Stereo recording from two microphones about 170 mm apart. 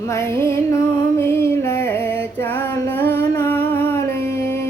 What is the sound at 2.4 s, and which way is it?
Female singing, 10° left (ahead or behind).